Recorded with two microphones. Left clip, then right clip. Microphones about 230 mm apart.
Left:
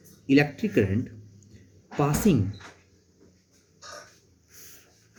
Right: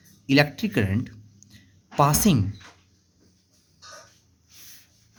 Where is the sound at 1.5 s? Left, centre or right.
Right.